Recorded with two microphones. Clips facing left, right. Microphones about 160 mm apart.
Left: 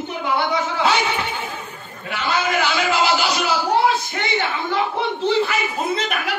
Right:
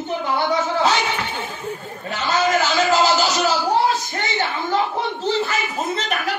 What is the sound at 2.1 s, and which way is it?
A man's voice, 40° right (ahead or behind).